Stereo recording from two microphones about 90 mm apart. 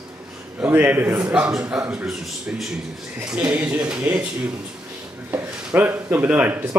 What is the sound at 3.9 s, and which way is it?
Speech, 35° right (ahead or behind).